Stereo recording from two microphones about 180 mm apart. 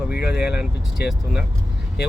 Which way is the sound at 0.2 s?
65° left (ahead or behind).